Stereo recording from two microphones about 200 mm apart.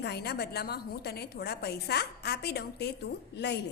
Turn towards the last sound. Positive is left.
turn(degrees=55)  # may be behind; listen again after turning